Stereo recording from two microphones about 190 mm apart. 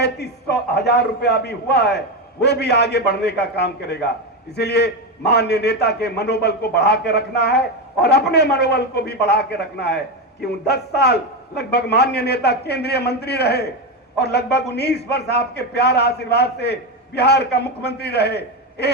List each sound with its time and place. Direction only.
0.0 s a man's voice: 60° left (ahead or behind)